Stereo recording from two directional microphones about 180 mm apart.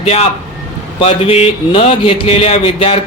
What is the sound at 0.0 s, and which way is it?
Speech, 35° left (ahead or behind).